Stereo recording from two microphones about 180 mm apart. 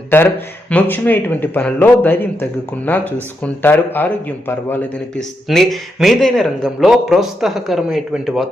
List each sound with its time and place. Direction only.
0.1 s a man's voice: 10° left (ahead or behind)